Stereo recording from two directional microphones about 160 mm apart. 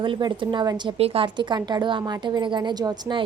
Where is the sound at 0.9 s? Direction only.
35° right (ahead or behind).